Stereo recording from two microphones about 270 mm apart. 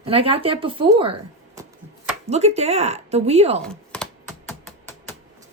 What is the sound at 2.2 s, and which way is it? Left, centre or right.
Speech, right.